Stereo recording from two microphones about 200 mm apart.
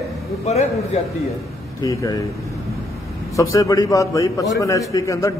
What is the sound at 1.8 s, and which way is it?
Speech, 15° left (ahead or behind).